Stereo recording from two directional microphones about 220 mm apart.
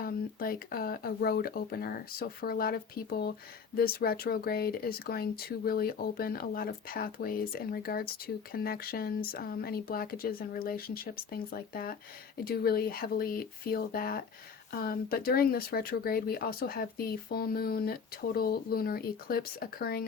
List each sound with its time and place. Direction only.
0.0 s speech: 40° left (ahead or behind)